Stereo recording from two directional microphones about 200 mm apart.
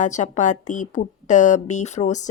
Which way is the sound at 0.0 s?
40° left (ahead or behind).